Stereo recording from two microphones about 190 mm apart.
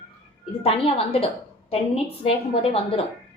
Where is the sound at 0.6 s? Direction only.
30° left (ahead or behind).